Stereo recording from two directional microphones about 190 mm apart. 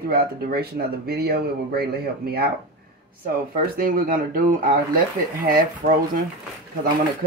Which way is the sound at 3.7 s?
50° right (ahead or behind).